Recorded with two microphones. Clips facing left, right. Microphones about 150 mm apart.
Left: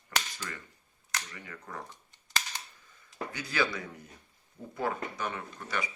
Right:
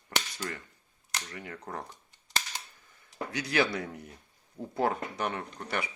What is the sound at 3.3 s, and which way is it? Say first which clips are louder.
Speech: right 4 dB; 75° right (ahead or behind).